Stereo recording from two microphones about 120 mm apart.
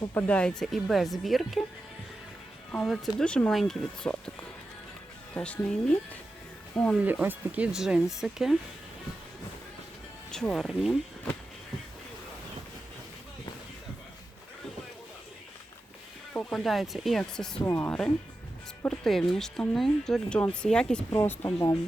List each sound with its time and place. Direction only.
0.1 s speech: 15° left (ahead or behind)
2.7 s speech: 5° left (ahead or behind)
5.3 s speech: 10° left (ahead or behind)
7.0 s speech: 15° right (ahead or behind)
10.3 s speech: 5° left (ahead or behind)
16.3 s speech: 5° left (ahead or behind)
21.1 s speech: 20° left (ahead or behind)